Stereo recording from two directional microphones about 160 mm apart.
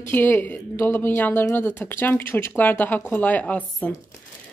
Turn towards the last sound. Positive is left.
turn(degrees=10)  # may be behind; listen again after turning